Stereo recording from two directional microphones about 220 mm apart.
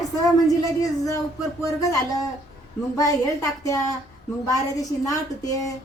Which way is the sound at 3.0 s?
15° left (ahead or behind).